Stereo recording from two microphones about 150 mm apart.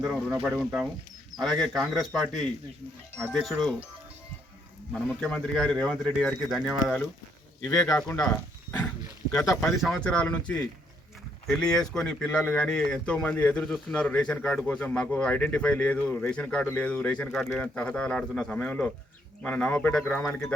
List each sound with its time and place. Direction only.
0.0 s speech: centre (ahead or behind)
1.4 s speech: centre (ahead or behind)
4.9 s speech: 5° left (ahead or behind)
7.7 s speech: 20° left (ahead or behind)
8.1 s wild animals: 20° left (ahead or behind)
9.3 s speech: 20° left (ahead or behind)
9.8 s a man's voice: 5° left (ahead or behind)